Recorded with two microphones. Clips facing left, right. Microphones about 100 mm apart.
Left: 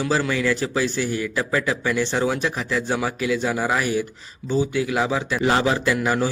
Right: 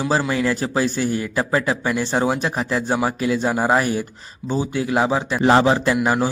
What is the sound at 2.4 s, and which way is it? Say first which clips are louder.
A man's voice: right 2 dB; 40° right (ahead or behind).